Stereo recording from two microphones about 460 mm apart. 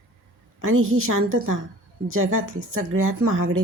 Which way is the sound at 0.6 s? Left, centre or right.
Right.